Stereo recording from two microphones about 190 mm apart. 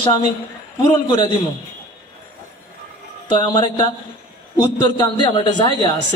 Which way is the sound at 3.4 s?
25° left (ahead or behind).